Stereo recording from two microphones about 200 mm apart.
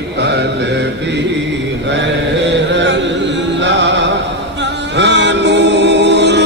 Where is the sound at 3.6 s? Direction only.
65° right (ahead or behind).